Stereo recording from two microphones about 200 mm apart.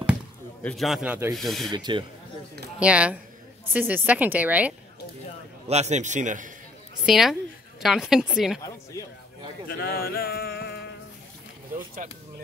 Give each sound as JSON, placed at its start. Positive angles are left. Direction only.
{"t": 0.7, "sound": "speech", "side_deg": 0}
{"t": 1.7, "sound": "speech", "side_deg": -20}
{"t": 2.8, "sound": "speech", "side_deg": -5}
{"t": 5.7, "sound": "a man's voice", "side_deg": -35}
{"t": 7.1, "sound": "speech", "side_deg": 0}
{"t": 9.0, "sound": "speech", "side_deg": 15}
{"t": 9.7, "sound": "a sound", "side_deg": 50}
{"t": 11.7, "sound": "speech", "side_deg": -40}